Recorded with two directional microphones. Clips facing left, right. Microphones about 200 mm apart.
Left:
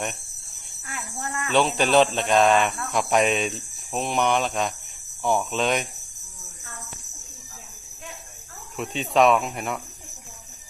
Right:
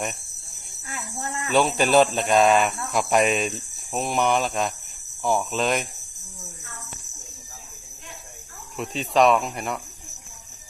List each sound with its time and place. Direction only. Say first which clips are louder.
1.2 s speech: even; 20° right (ahead or behind)
1.5 s speech: right 1 dB; 5° right (ahead or behind)
8.7 s speech: even; centre (ahead or behind)